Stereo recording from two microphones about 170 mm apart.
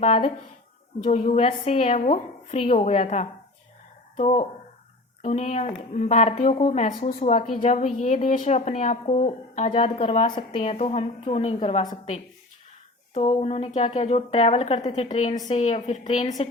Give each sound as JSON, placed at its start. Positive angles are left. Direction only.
{"t": 0.0, "sound": "a woman's voice", "side_deg": 35}
{"t": 9.6, "sound": "a woman's voice", "side_deg": 35}
{"t": 13.1, "sound": "a woman's voice", "side_deg": 45}